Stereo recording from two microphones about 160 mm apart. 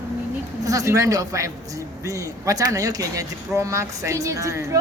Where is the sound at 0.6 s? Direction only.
20° right (ahead or behind).